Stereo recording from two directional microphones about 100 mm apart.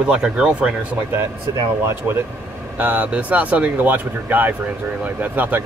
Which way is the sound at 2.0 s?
20° right (ahead or behind).